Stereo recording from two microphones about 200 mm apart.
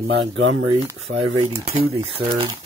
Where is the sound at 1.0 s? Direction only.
30° right (ahead or behind).